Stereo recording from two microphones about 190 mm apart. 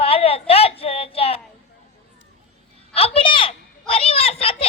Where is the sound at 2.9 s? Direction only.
30° left (ahead or behind).